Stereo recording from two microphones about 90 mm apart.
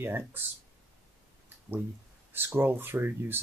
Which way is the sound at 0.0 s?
25° right (ahead or behind).